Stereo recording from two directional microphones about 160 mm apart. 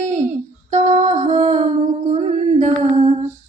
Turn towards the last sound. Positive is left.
turn(degrees=-45)  # may be behind; listen again after turning